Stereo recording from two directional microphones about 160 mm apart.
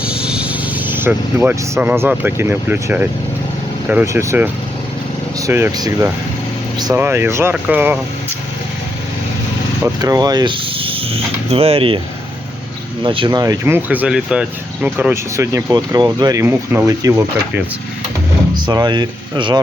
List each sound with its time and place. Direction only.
0.0 s speech: 5° right (ahead or behind)
9.8 s speech: 25° right (ahead or behind)
13.0 s speech: 30° right (ahead or behind)